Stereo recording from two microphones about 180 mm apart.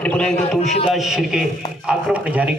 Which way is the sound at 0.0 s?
5° left (ahead or behind).